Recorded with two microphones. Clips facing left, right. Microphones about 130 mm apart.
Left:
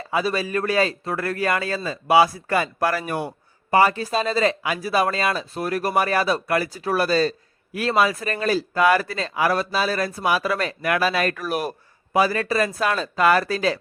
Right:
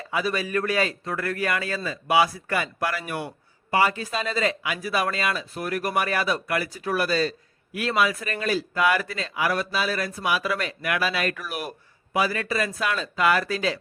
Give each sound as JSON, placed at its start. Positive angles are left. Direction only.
{"t": 0.1, "sound": "a man's voice", "side_deg": 30}